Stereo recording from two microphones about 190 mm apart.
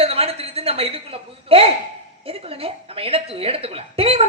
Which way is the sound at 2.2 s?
30° right (ahead or behind).